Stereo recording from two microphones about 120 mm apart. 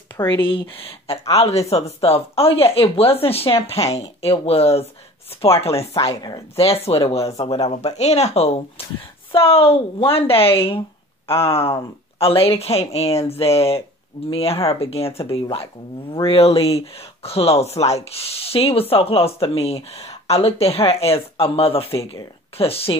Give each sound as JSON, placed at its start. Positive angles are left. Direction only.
{"t": 0.3, "sound": "speech", "side_deg": 45}
{"t": 5.9, "sound": "speech", "side_deg": 35}
{"t": 6.5, "sound": "speech", "side_deg": 55}